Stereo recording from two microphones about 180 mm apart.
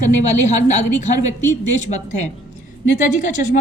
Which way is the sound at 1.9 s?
45° left (ahead or behind).